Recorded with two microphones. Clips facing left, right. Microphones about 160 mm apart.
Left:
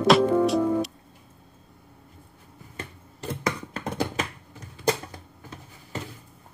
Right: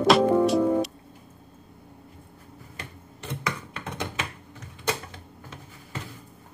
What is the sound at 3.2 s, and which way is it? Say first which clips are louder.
Computer keyboard: left 4 dB; 40° left (ahead or behind).